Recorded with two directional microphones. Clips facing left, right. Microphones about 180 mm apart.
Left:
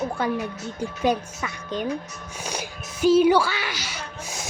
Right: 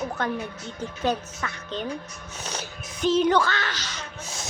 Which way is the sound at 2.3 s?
10° left (ahead or behind).